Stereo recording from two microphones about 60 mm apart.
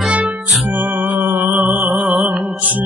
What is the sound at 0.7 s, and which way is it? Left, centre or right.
Music, right.